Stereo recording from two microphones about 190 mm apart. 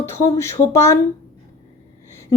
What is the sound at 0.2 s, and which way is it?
Speech, 15° left (ahead or behind).